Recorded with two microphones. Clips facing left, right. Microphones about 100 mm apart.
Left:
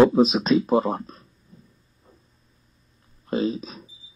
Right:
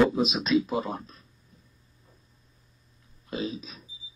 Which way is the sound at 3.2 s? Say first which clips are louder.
Left 8 dB; 40° left (ahead or behind).